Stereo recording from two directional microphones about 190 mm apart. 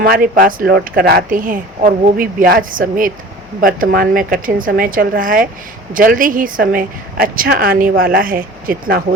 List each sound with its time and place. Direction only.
0.0 s speech: 50° right (ahead or behind)